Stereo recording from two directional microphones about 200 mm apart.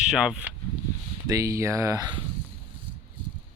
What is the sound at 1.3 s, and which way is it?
Speech, 15° right (ahead or behind).